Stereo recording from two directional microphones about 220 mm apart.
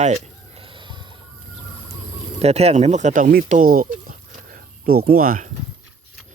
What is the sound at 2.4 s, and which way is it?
Speech, 30° right (ahead or behind).